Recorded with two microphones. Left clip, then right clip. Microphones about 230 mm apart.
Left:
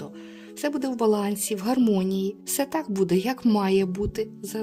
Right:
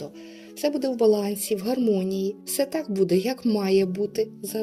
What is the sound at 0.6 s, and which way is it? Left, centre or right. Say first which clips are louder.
A woman's voice: right 3 dB; left.